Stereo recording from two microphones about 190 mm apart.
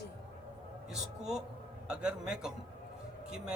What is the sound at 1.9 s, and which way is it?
Speech, 5° right (ahead or behind).